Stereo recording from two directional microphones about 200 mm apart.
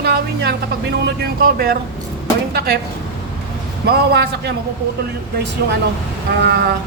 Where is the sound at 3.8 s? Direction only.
55° right (ahead or behind).